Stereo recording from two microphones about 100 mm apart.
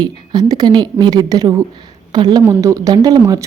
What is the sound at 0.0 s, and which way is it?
A woman's voice, 40° right (ahead or behind).